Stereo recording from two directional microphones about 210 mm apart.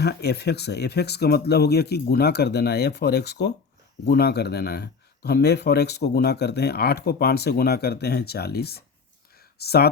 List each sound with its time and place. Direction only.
0.0 s speech: 50° left (ahead or behind)